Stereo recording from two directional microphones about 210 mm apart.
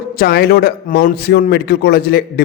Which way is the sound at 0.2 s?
45° left (ahead or behind).